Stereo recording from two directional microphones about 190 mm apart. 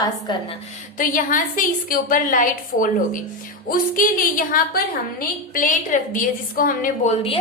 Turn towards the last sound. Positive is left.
turn(degrees=45)  # may be behind; listen again after turning